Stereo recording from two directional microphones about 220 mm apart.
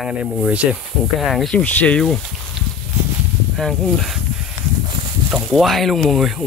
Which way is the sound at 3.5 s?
Centre (ahead or behind).